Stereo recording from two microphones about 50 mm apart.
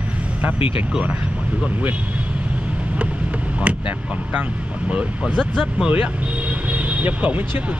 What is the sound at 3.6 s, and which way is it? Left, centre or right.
Speech, right.